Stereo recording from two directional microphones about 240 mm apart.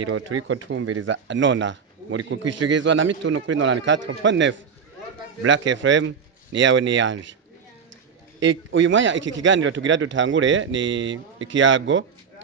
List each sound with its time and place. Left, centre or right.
0.0 s a man's voice: right
2.4 s a man's voice: right
2.8 s a man's voice: right
8.4 s a man's voice: right